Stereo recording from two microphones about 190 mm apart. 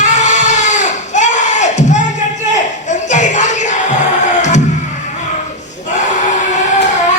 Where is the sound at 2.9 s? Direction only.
40° left (ahead or behind).